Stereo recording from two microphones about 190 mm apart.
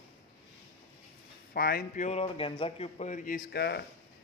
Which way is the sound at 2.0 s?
30° left (ahead or behind).